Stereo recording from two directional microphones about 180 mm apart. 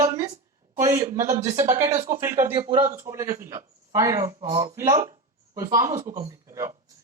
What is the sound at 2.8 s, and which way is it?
Speech, 15° right (ahead or behind).